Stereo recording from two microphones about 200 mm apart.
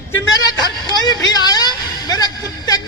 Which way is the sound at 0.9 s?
20° left (ahead or behind).